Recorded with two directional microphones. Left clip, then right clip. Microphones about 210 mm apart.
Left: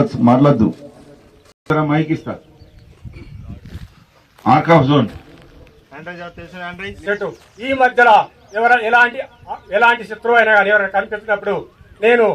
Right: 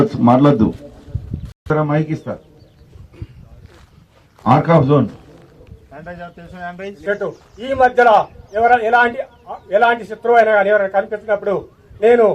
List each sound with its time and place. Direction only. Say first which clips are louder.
0.3 s speech: even; 30° left (ahead or behind)
1.6 s a man's voice: left 1 dB; 50° right (ahead or behind)
4.4 s a man's voice: left 1 dB; 45° right (ahead or behind)
6.6 s a man's voice: even; 55° right (ahead or behind)